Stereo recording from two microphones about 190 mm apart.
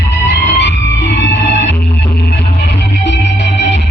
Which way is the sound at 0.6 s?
70° left (ahead or behind).